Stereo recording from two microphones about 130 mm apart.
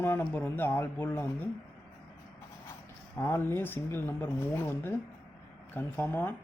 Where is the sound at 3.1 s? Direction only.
20° left (ahead or behind).